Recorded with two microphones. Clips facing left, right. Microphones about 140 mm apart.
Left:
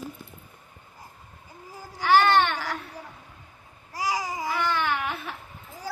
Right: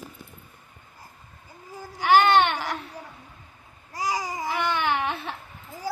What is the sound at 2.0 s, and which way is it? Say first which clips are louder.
Baby cry: right 1 dB; 20° right (ahead or behind).